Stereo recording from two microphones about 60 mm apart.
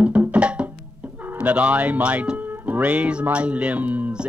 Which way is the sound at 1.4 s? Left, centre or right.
Right.